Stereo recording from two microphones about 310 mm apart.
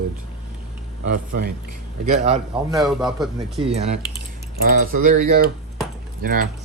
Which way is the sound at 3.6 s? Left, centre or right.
Centre.